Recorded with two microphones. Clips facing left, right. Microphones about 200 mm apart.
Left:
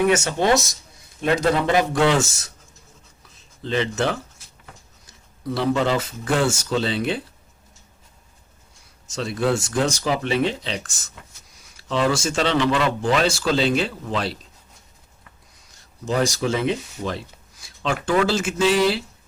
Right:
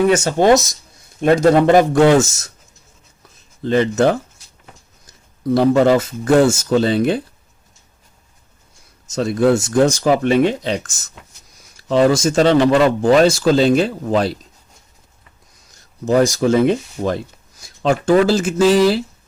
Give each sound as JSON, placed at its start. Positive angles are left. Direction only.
{"t": 0.3, "sound": "speech", "side_deg": -45}
{"t": 3.6, "sound": "speech", "side_deg": -45}
{"t": 9.0, "sound": "speech", "side_deg": -45}
{"t": 16.0, "sound": "speech", "side_deg": -45}